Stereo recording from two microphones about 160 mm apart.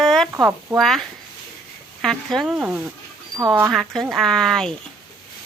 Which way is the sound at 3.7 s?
Centre (ahead or behind).